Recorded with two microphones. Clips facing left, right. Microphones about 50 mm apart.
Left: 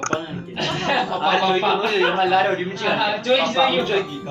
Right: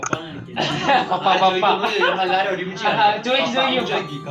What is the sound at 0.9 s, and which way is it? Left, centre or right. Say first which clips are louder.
Speech: right 4 dB; right.